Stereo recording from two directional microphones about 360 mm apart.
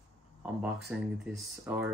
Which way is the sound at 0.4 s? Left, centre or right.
Centre.